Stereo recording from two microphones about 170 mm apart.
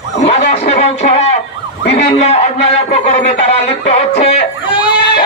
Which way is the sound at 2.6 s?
40° left (ahead or behind).